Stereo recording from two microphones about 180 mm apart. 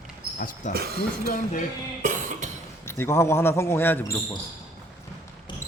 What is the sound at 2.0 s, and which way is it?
Cough, 45° right (ahead or behind).